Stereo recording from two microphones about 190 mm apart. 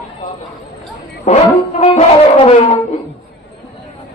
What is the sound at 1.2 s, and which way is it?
Music, 35° left (ahead or behind).